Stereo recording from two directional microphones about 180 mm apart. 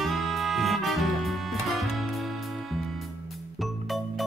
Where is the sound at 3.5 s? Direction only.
Centre (ahead or behind).